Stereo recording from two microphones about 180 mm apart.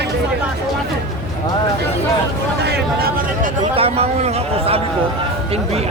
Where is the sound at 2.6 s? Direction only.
60° right (ahead or behind).